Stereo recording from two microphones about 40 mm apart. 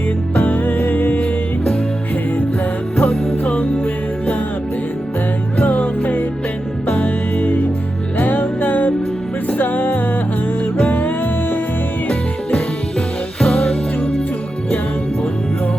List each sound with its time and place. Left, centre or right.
0.3 s music: left
3.0 s music: left
5.5 s music: left
10.8 s music: left
13.4 s music: left